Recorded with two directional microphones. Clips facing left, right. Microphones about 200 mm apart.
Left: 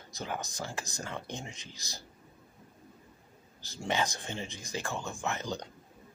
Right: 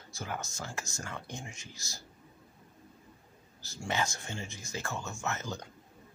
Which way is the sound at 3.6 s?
15° left (ahead or behind).